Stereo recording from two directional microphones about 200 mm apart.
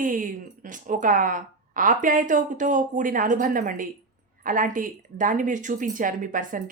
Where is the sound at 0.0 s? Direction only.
40° right (ahead or behind).